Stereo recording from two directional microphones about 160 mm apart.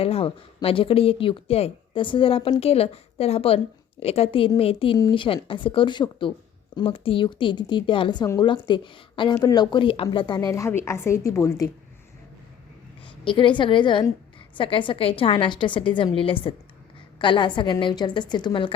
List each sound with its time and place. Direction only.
0.0 s a woman's voice: 35° left (ahead or behind); by 11.7 s 20° left (ahead or behind)
13.2 s a woman's voice: 30° left (ahead or behind)